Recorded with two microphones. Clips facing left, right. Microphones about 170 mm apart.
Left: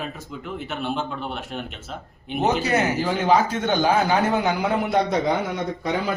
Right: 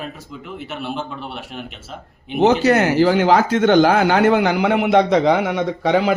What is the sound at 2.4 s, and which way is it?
Speech, 85° right.